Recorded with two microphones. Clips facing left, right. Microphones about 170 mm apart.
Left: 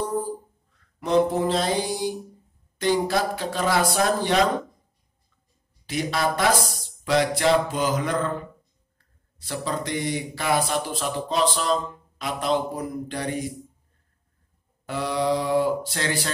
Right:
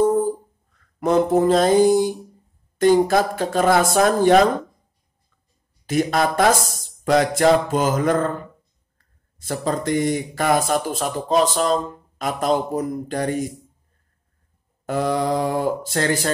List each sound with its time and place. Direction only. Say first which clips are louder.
0.0 s a sound: right 9 dB; 50° right (ahead or behind)
0.9 s speech: right 4 dB; 50° right (ahead or behind)
5.9 s speech: right 5 dB; 50° right (ahead or behind)
14.9 s speech: right 3 dB; 45° right (ahead or behind)